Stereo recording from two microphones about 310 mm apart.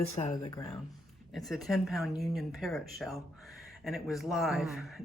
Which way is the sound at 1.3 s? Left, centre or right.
Centre.